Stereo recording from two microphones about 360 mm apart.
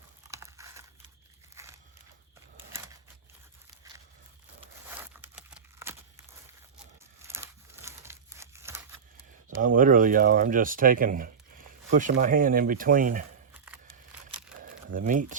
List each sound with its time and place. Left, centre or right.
0.3 s crumpling: centre
4.6 s a sound: centre
7.2 s crumpling: centre
9.6 s speech: right
14.7 s crumpling: right